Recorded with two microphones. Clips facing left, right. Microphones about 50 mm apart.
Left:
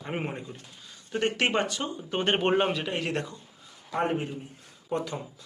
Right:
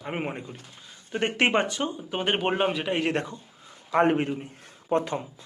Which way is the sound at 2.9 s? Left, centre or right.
Right.